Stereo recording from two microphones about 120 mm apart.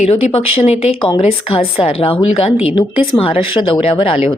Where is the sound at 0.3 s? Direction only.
60° left (ahead or behind).